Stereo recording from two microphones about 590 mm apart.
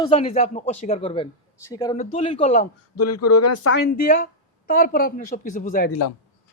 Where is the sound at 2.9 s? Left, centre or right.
Left.